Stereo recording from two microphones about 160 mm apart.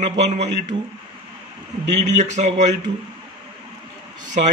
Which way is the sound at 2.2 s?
45° right (ahead or behind).